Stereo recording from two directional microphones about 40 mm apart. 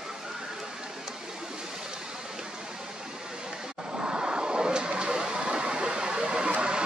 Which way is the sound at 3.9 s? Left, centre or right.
Right.